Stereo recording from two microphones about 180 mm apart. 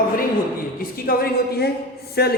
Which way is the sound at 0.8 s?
55° left (ahead or behind).